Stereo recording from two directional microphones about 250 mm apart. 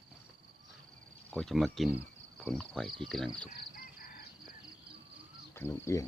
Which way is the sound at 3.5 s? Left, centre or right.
Left.